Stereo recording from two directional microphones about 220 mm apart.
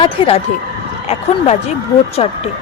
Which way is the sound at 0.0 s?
25° left (ahead or behind).